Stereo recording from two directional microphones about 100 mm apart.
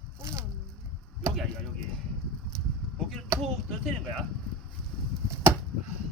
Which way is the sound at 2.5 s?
5° left (ahead or behind).